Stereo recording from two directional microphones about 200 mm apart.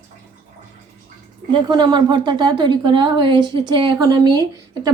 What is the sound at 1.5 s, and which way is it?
Speech, 20° right (ahead or behind).